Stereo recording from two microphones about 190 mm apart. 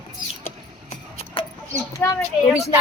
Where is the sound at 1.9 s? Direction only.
15° left (ahead or behind).